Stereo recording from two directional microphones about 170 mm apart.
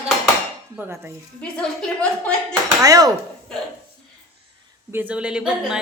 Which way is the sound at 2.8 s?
20° right (ahead or behind).